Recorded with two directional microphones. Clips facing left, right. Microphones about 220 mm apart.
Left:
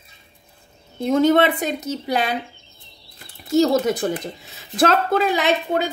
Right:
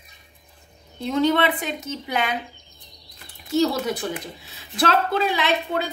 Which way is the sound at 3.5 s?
45° left (ahead or behind).